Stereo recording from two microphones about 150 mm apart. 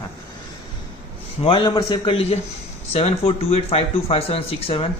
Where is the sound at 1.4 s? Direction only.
35° left (ahead or behind).